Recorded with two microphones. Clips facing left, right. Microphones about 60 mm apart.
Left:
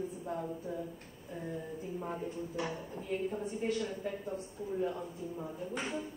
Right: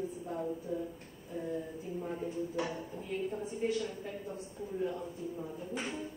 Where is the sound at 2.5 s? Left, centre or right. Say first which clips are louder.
Right 1 dB; centre.